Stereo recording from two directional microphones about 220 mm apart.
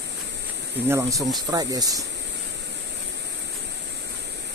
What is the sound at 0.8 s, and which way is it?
Speech, 15° right (ahead or behind).